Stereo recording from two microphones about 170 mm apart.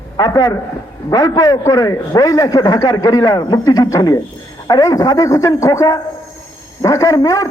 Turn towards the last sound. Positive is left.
turn(degrees=20)  # may be behind; listen again after turning